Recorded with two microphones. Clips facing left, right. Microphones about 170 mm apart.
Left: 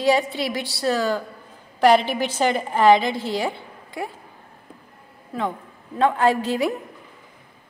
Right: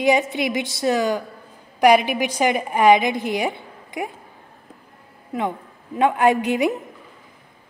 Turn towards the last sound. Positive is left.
turn(degrees=-20)  # may be behind; listen again after turning